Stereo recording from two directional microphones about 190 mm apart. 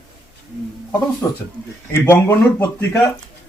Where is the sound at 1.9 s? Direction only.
15° left (ahead or behind).